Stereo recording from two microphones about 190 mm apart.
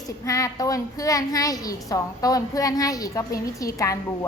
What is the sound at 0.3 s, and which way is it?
A woman's voice, 20° left (ahead or behind).